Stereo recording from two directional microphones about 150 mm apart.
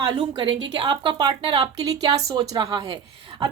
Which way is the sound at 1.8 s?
25° right (ahead or behind).